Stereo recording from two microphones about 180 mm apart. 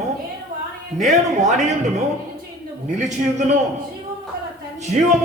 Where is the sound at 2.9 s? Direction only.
40° right (ahead or behind).